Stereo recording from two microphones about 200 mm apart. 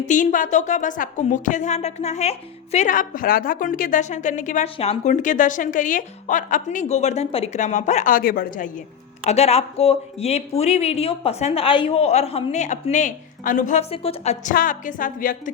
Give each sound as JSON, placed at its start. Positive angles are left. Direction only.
{"t": 0.0, "sound": "a woman's voice", "side_deg": 40}
{"t": 14.5, "sound": "a woman's voice", "side_deg": 40}